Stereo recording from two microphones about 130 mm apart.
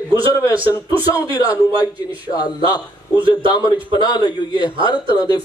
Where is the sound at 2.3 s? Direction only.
30° left (ahead or behind).